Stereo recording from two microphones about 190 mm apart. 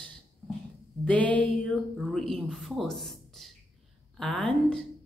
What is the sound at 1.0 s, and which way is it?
Speech, 5° left (ahead or behind).